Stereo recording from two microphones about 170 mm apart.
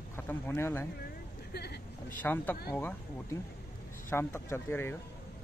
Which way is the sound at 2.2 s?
10° left (ahead or behind).